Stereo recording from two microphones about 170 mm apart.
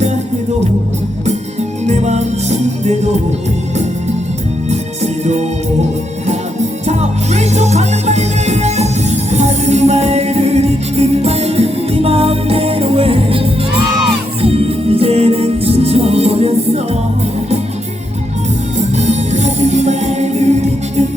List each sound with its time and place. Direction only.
1.9 s music: 40° right (ahead or behind)
6.8 s music: 40° right (ahead or behind)
18.9 s music: 40° right (ahead or behind)